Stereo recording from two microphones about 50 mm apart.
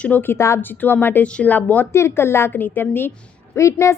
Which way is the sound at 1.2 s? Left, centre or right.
Left.